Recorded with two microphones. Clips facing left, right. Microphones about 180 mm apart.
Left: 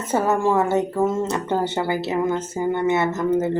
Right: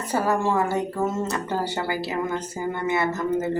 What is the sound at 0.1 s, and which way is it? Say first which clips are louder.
Speech: left 3 dB; 25° left (ahead or behind).